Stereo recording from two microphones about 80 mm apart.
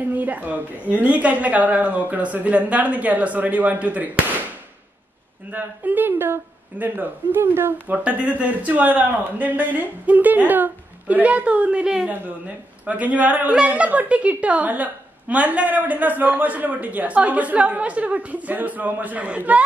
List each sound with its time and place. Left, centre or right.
0.1 s a woman's voice: right
5.5 s a woman's voice: right
8.0 s a woman's voice: centre